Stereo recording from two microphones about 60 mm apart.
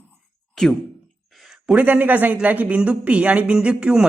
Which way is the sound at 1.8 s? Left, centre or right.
Right.